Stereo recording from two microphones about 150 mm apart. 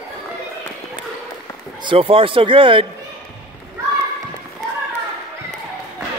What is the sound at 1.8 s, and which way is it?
Speech, 35° right (ahead or behind).